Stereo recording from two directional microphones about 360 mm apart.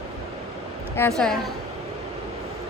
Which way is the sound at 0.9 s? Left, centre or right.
Centre.